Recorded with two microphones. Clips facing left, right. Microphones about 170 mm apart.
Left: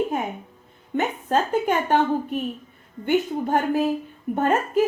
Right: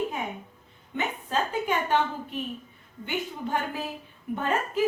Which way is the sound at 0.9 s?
50° left (ahead or behind).